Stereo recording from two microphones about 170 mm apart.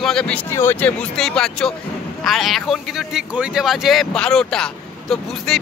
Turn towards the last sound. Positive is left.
turn(degrees=5)  # may be behind; listen again after turning